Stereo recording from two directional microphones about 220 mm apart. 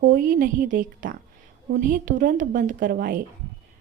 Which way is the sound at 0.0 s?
40° right (ahead or behind).